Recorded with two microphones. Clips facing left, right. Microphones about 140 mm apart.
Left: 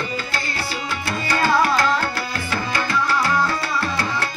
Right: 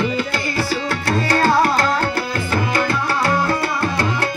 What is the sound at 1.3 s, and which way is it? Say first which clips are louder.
Tabla: right 2 dB; 50° right (ahead or behind).